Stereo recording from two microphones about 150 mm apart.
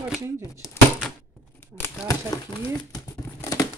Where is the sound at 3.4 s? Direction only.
25° left (ahead or behind).